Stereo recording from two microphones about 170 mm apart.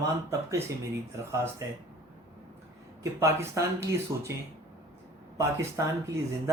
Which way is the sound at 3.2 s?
15° right (ahead or behind).